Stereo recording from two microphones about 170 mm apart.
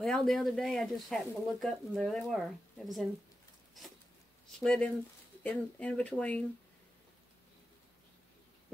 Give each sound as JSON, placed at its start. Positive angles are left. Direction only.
{"t": 0.0, "sound": "speech", "side_deg": 0}
{"t": 4.5, "sound": "speech", "side_deg": 5}